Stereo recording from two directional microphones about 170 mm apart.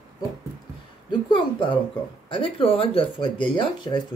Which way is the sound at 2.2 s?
30° left (ahead or behind).